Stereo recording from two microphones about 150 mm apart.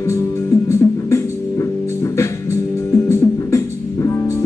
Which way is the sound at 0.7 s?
20° left (ahead or behind).